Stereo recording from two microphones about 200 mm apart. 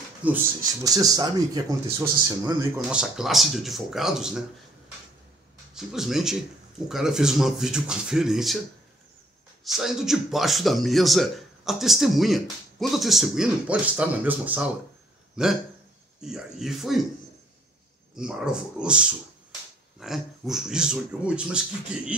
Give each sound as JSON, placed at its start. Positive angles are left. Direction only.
{"t": 0.2, "sound": "speech", "side_deg": -5}
{"t": 0.8, "sound": "a man's voice", "side_deg": -20}
{"t": 5.8, "sound": "a man's voice", "side_deg": 0}
{"t": 9.7, "sound": "a man's voice", "side_deg": 0}
{"t": 18.1, "sound": "a man's voice", "side_deg": -5}